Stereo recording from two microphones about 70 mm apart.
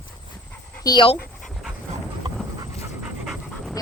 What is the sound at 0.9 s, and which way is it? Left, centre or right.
Speech, left.